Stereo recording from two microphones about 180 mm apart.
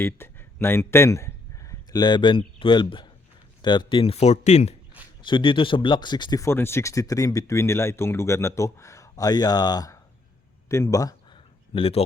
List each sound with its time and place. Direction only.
0.0 s speech: 15° left (ahead or behind); by 4.7 s 40° left (ahead or behind)
5.2 s speech: 30° left (ahead or behind)
10.7 s a sound: 15° left (ahead or behind); by 12.0 s 30° left (ahead or behind)